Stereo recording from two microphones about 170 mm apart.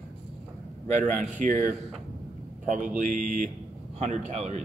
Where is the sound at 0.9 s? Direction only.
50° right (ahead or behind).